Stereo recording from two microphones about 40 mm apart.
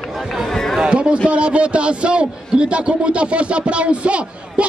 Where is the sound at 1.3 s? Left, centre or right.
Right.